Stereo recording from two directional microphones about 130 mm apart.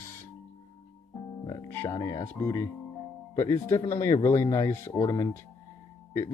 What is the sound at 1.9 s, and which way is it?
Speech, 30° left (ahead or behind).